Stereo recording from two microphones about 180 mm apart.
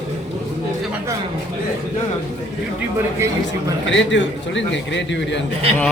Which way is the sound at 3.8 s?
90° left.